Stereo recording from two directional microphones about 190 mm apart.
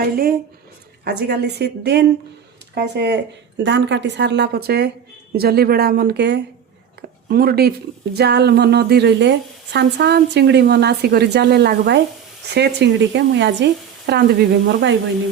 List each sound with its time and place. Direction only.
0.0 s a woman's voice: 50° right (ahead or behind)
3.6 s a woman's voice: 70° right (ahead or behind)
14.1 s a woman's voice: 60° right (ahead or behind)